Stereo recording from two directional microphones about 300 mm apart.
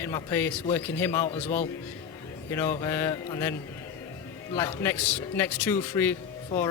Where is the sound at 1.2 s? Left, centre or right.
Left.